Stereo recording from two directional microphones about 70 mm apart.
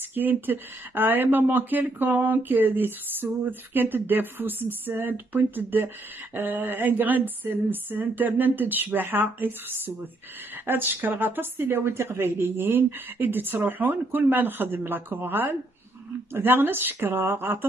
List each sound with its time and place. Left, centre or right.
0.1 s speech: right